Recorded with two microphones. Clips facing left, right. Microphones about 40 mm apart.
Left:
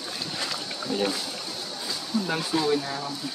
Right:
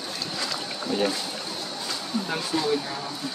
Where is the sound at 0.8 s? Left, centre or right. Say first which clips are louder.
Right 2 dB; centre.